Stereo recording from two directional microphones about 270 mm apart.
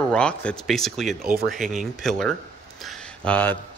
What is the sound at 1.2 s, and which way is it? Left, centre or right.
Speech, right.